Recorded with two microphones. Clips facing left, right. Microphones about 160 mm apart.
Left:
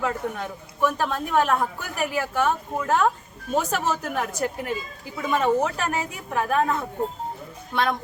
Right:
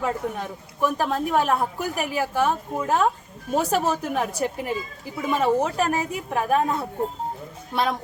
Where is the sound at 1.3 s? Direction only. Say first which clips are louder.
Left 2 dB; 10° right (ahead or behind).